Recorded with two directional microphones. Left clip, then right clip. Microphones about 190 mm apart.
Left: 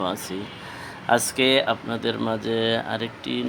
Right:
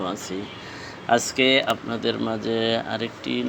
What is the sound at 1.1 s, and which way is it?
Speech, 10° left (ahead or behind).